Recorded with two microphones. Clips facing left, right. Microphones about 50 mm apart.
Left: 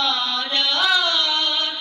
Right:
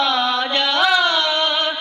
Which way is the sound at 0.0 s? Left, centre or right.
Right.